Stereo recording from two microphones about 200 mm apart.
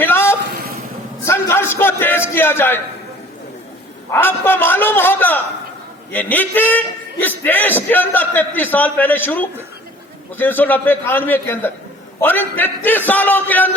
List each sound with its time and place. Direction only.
0.0 s a sound: 10° left (ahead or behind)
2.3 s a man's voice: 10° left (ahead or behind)
4.1 s a man's voice: 10° left (ahead or behind)